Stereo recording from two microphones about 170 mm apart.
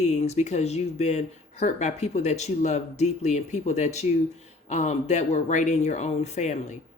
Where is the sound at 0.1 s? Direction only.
40° left (ahead or behind).